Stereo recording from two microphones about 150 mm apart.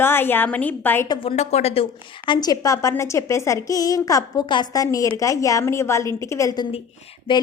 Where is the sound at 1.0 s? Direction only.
30° left (ahead or behind).